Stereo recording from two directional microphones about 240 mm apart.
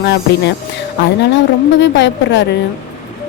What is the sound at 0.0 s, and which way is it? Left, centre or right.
Speech, left.